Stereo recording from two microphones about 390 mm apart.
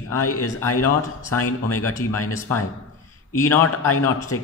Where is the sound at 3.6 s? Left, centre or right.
Left.